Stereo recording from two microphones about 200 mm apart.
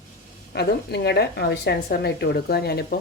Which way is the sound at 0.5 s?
55° left (ahead or behind).